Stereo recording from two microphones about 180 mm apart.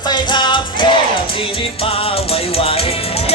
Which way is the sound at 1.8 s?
30° left (ahead or behind).